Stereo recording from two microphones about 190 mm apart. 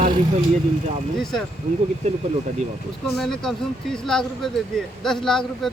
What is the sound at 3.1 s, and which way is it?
Speech, centre (ahead or behind).